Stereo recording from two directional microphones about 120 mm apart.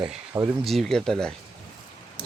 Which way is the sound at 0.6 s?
Centre (ahead or behind).